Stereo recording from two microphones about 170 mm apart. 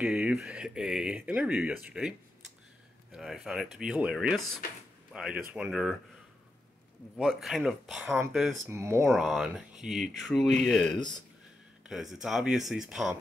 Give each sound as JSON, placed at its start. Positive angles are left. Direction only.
{"t": 0.0, "sound": "speech", "side_deg": -5}
{"t": 7.2, "sound": "speech", "side_deg": 0}
{"t": 8.6, "sound": "speech", "side_deg": -15}
{"t": 9.1, "sound": "speech", "side_deg": 0}